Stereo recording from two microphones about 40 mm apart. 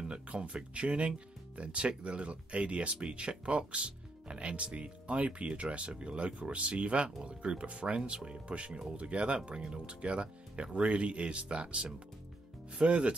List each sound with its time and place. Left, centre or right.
0.0 s speech: right